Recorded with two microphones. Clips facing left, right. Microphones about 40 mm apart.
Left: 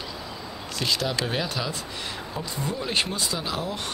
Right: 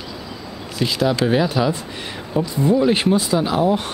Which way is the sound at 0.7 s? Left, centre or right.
Centre.